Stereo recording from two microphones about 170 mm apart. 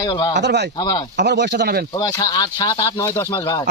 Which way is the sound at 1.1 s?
80° right.